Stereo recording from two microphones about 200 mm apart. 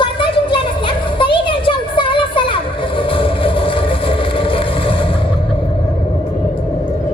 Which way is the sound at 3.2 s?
25° left (ahead or behind).